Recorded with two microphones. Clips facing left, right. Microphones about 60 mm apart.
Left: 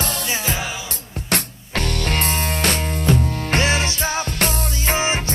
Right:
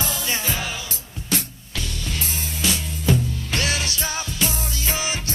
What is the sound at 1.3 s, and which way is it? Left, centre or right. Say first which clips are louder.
Music: left 3 dB; left.